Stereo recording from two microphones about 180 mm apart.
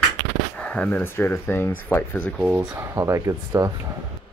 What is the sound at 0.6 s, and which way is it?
Speech, 5° left (ahead or behind).